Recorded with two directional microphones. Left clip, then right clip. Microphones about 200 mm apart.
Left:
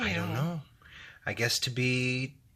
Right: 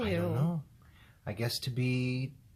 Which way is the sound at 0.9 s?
10° left (ahead or behind).